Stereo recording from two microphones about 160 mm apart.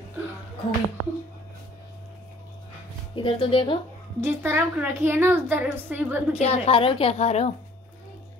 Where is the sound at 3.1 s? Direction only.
30° left (ahead or behind).